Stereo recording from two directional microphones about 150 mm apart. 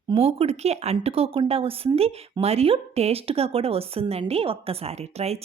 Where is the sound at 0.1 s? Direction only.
40° right (ahead or behind).